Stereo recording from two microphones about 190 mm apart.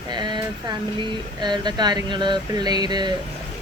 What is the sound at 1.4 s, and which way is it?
A woman's voice, 20° right (ahead or behind).